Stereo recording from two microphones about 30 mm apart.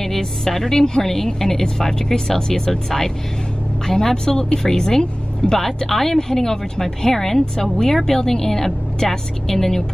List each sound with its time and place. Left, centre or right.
0.0 s a woman's voice: centre